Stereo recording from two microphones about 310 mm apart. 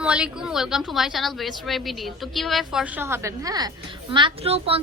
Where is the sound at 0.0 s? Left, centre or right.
Centre.